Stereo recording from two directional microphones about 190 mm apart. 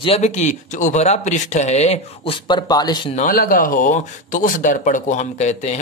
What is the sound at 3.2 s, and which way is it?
Speech, 45° left (ahead or behind).